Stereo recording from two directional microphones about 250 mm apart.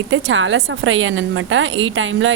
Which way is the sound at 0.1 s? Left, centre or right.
Right.